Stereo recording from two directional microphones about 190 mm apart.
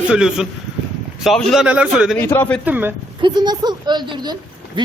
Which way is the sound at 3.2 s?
20° right (ahead or behind).